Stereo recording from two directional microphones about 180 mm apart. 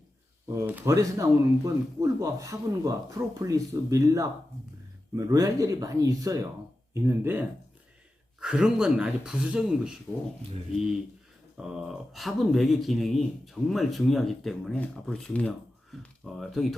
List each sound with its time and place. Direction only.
0.5 s speech: 15° right (ahead or behind)
11.5 s speech: centre (ahead or behind)